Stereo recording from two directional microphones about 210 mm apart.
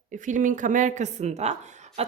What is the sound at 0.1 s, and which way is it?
Speech, 35° right (ahead or behind).